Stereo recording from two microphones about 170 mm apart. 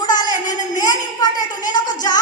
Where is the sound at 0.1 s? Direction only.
25° left (ahead or behind).